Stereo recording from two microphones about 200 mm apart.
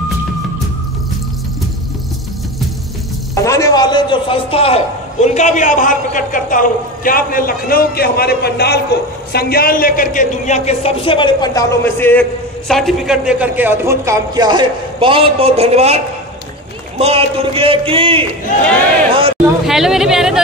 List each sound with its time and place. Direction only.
3.3 s a man's voice: 15° left (ahead or behind); by 16.0 s 30° right (ahead or behind)
17.0 s speech: 30° right (ahead or behind)
19.6 s a man's voice: centre (ahead or behind)